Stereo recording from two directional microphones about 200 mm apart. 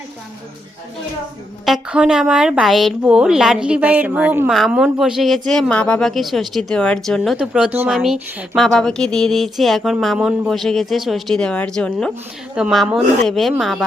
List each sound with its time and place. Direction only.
1.6 s a woman's voice: 5° right (ahead or behind)